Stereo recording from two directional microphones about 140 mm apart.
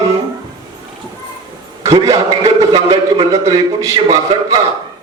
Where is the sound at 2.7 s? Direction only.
45° right (ahead or behind).